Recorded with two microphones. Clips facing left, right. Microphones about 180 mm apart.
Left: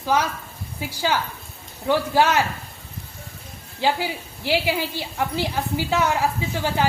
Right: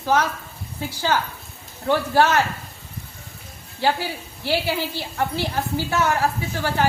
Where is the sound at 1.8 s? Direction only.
15° left (ahead or behind).